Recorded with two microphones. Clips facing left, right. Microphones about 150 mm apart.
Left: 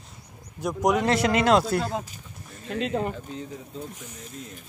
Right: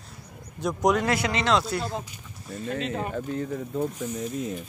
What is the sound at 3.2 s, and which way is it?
Speech, 60° right (ahead or behind).